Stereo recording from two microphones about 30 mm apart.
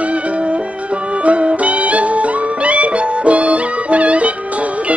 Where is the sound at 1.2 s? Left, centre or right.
Right.